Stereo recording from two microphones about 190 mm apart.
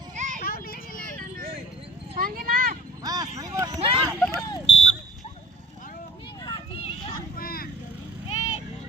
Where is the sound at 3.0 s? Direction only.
20° right (ahead or behind).